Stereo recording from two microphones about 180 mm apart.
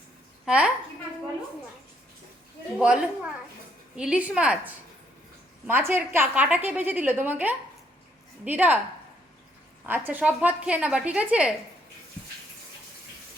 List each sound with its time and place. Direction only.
0.4 s a woman's voice: 5° right (ahead or behind)
2.7 s a woman's voice: 5° right (ahead or behind)
9.8 s a woman's voice: 10° right (ahead or behind)